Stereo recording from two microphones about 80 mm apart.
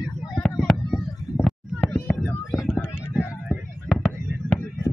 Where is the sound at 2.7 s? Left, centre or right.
Left.